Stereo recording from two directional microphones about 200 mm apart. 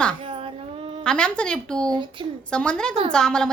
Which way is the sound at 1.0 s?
5° left (ahead or behind).